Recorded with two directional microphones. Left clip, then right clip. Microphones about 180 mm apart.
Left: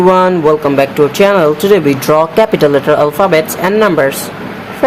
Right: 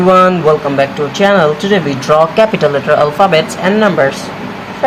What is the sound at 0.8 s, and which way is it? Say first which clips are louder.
Speech: left 3 dB; 35° left (ahead or behind).